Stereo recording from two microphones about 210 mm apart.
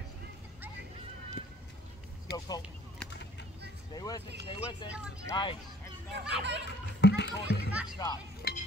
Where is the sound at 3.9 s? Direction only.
20° left (ahead or behind).